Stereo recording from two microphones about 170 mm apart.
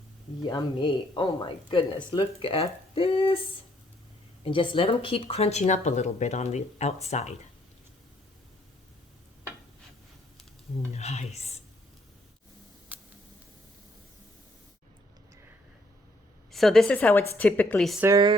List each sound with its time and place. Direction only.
0.4 s speech: 25° left (ahead or behind)
4.4 s speech: 30° left (ahead or behind)
10.9 s speech: 40° left (ahead or behind)
12.9 s a sound: 10° right (ahead or behind)
16.5 s a woman's voice: centre (ahead or behind)